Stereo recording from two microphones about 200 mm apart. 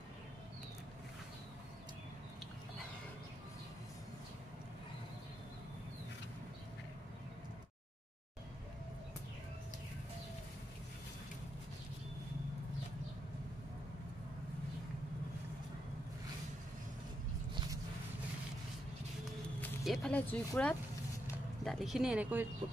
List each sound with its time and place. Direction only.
19.6 s speech: centre (ahead or behind)